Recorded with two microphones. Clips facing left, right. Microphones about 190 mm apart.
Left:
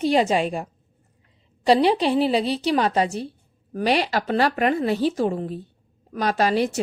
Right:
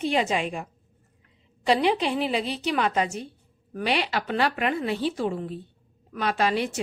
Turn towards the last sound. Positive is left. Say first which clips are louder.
# left 4 dB
turn(degrees=40)  # may be behind; listen again after turning